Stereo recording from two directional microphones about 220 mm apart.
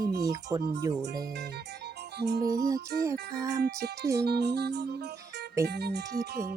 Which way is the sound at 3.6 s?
45° right (ahead or behind).